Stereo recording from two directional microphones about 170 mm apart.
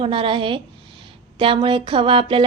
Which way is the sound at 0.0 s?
30° right (ahead or behind).